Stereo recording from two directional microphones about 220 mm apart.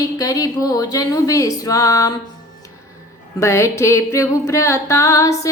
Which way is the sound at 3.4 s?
15° left (ahead or behind).